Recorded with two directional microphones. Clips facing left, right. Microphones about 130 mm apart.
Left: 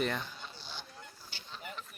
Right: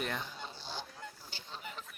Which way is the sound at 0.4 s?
35° right (ahead or behind).